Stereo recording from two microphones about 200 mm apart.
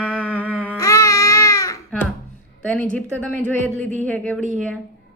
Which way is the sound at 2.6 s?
5° left (ahead or behind).